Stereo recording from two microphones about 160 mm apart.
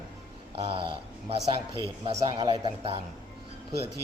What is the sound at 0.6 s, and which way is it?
Speech, 30° right (ahead or behind).